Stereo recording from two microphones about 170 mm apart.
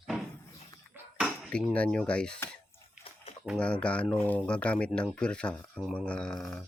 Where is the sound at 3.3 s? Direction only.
35° left (ahead or behind).